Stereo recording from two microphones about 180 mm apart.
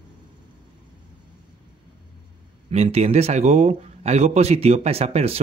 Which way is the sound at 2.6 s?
35° right (ahead or behind).